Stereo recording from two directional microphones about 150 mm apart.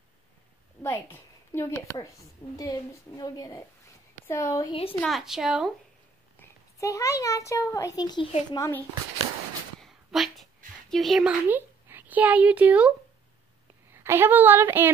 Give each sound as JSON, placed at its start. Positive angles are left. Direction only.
{"t": 0.8, "sound": "a woman's voice", "side_deg": 15}
{"t": 5.0, "sound": "a woman's voice", "side_deg": 0}
{"t": 6.4, "sound": "a child's voice", "side_deg": 20}
{"t": 9.8, "sound": "a sound", "side_deg": 0}
{"t": 10.9, "sound": "a woman's voice", "side_deg": 0}
{"t": 11.4, "sound": "a child's voice", "side_deg": -15}
{"t": 13.9, "sound": "a woman's voice", "side_deg": -15}